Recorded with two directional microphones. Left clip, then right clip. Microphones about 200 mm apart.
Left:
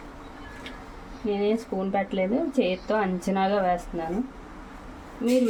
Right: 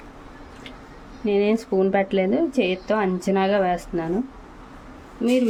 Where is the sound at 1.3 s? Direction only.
30° right (ahead or behind).